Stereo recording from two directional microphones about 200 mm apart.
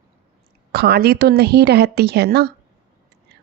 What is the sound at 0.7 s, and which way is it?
Speech, 55° right (ahead or behind).